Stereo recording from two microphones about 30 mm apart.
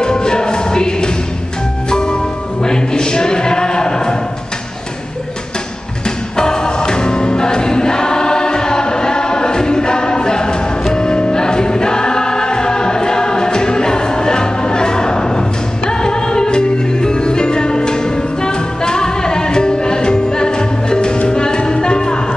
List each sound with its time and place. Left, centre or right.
0.0 s music: left
2.6 s a sound: left
6.0 s music: left
10.9 s choir: left
21.3 s music: left